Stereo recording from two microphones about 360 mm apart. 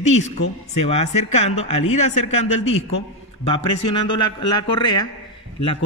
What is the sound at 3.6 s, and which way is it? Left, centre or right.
Speech, left.